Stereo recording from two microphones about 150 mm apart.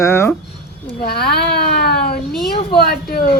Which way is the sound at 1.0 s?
90° left.